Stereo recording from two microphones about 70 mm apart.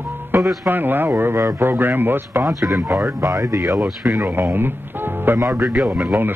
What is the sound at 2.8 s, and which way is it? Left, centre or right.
Speech, right.